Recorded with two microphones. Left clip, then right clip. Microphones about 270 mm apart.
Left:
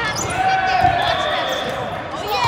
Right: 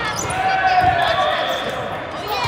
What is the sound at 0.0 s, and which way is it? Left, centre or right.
Basketball bounce, left.